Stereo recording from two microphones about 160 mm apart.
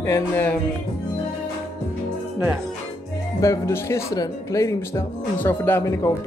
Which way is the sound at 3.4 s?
20° left (ahead or behind).